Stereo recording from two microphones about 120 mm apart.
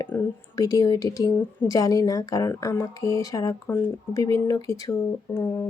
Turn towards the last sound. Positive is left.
turn(degrees=25)  # may be behind; listen again after turning